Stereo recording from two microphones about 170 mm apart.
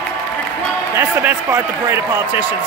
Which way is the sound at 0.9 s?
15° right (ahead or behind).